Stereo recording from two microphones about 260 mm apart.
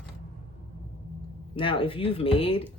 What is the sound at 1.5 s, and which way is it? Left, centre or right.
Speech, centre.